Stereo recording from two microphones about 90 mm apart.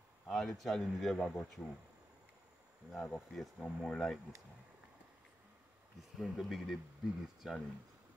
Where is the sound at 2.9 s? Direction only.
20° left (ahead or behind).